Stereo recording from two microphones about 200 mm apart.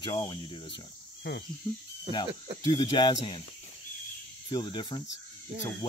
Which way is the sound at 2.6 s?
25° left (ahead or behind).